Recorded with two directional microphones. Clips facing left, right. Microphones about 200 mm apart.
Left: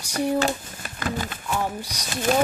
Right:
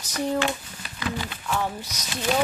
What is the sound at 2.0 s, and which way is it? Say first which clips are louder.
Speech: left 3 dB; 45° left (ahead or behind).